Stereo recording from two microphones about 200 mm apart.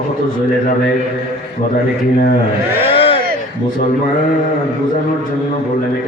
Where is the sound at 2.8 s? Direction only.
25° left (ahead or behind).